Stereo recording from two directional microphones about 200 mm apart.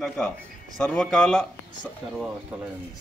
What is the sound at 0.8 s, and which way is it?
Speech, 5° left (ahead or behind).